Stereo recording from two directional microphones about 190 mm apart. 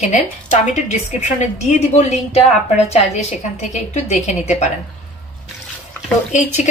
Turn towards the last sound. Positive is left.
turn(degrees=40)  # may be behind; listen again after turning